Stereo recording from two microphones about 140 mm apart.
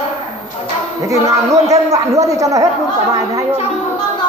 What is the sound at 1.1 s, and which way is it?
A man's voice, 25° right (ahead or behind).